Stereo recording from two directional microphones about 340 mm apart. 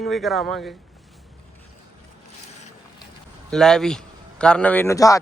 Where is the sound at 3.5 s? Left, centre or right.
Centre.